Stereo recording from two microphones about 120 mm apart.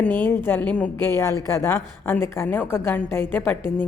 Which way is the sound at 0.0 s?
10° left (ahead or behind).